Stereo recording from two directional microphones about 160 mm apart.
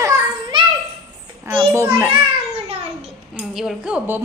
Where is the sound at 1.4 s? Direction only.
15° right (ahead or behind).